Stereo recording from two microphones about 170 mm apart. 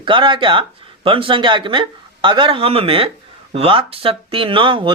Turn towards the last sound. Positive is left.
turn(degrees=-30)  # may be behind; listen again after turning